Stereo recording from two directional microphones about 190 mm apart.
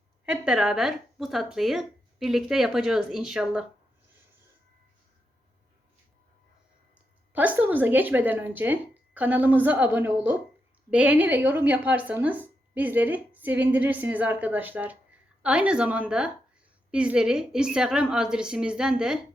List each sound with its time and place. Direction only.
0.3 s speech: 5° right (ahead or behind)
7.3 s a woman's voice: 10° right (ahead or behind)